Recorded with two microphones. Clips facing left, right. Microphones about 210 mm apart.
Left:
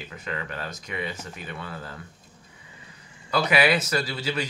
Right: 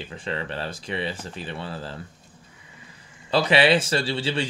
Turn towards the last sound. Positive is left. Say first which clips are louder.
# right 3 dB
turn(degrees=-30)  # may be behind; listen again after turning